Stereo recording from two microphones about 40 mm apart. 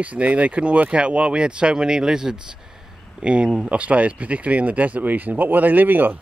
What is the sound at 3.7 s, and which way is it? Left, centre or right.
Speech, right.